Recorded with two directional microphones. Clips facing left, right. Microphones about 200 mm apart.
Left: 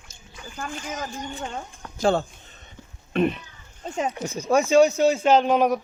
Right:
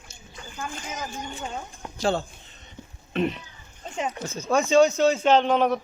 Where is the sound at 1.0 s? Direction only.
Centre (ahead or behind).